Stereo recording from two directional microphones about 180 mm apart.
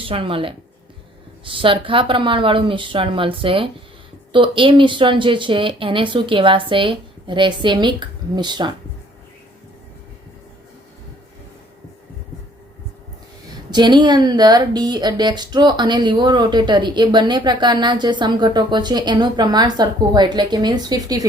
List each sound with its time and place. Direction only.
0.0 s speech: 30° right (ahead or behind)
13.7 s speech: 25° right (ahead or behind)